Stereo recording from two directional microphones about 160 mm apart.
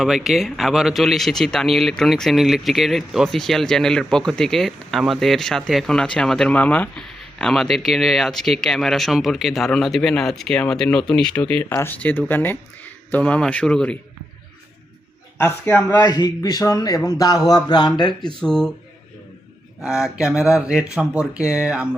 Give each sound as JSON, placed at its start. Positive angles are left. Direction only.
{"t": 0.0, "sound": "speech", "side_deg": -5}
{"t": 15.4, "sound": "speech", "side_deg": 15}
{"t": 16.1, "sound": "speech", "side_deg": 25}
{"t": 18.3, "sound": "speech", "side_deg": 5}
{"t": 19.8, "sound": "speech", "side_deg": -5}